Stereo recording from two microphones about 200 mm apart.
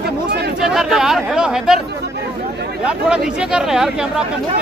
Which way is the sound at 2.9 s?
5° right (ahead or behind).